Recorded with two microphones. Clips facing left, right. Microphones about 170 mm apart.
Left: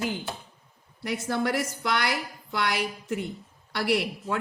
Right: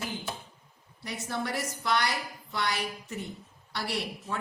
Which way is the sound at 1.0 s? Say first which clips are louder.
Left 7 dB; 80° left.